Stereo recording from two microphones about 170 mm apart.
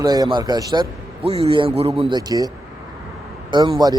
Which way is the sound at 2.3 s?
20° right (ahead or behind).